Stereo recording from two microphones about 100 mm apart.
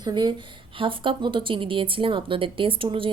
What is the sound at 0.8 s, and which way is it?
A woman's voice, 60° right (ahead or behind).